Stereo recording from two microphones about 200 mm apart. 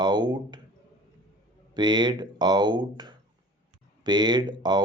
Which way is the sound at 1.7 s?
20° right (ahead or behind).